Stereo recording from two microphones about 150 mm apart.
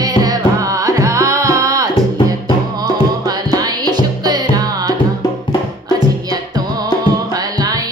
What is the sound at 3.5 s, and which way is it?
Music, 25° right (ahead or behind).